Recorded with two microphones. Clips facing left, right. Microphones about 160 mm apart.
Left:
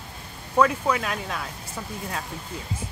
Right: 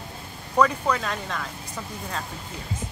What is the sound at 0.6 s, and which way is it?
Speech, 5° left (ahead or behind).